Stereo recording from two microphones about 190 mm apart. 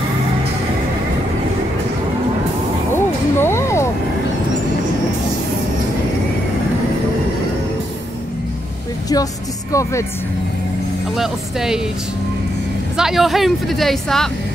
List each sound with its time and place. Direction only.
2.9 s vehicle: 10° left (ahead or behind)
9.1 s speech: 15° left (ahead or behind)
11.1 s speech: centre (ahead or behind)
12.9 s speech: centre (ahead or behind)